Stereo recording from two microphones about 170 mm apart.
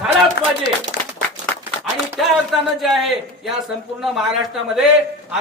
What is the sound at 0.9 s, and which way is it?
Applause, 75° left (ahead or behind).